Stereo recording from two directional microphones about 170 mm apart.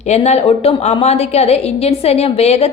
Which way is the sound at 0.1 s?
40° left (ahead or behind).